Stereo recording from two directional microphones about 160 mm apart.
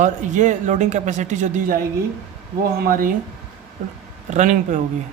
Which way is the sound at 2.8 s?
60° right (ahead or behind).